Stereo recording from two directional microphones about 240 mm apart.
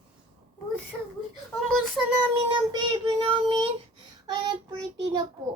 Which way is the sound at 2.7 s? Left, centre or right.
Right.